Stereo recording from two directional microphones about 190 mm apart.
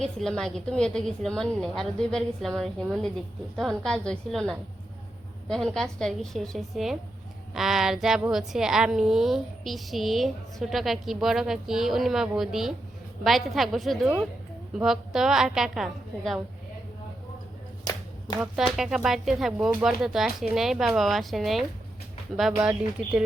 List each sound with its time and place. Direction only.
0.0 s a woman's voice: centre (ahead or behind)
18.3 s a woman's voice: centre (ahead or behind)